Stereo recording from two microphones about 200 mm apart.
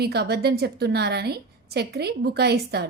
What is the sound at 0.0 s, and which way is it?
A woman's voice, 55° right (ahead or behind).